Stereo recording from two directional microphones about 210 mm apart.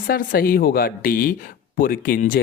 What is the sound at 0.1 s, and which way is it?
Speech, 45° left (ahead or behind).